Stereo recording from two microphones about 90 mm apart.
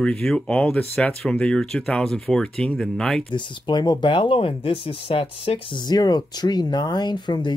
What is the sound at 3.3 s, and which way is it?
Speech, 55° left (ahead or behind).